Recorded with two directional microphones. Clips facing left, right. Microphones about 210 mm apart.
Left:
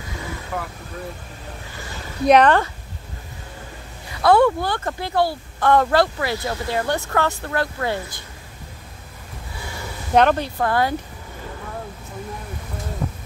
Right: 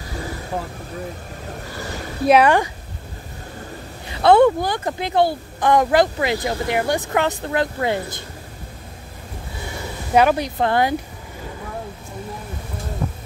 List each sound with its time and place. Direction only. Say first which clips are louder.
0.5 s speech: right 2 dB; 25° right (ahead or behind)
2.2 s speech: even; 5° right (ahead or behind)
4.1 s speech: right 3 dB; 25° right (ahead or behind)
10.1 s speech: even; 10° right (ahead or behind)
10.6 s speech: right 3 dB; 25° right (ahead or behind)